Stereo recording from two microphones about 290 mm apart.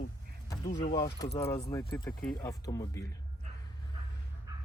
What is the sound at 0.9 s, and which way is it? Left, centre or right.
Speech, centre.